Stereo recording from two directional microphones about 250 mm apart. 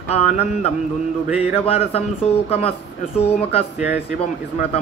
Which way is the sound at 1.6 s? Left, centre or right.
Left.